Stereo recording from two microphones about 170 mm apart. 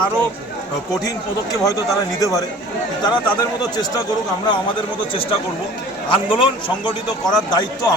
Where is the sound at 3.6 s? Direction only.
25° left (ahead or behind).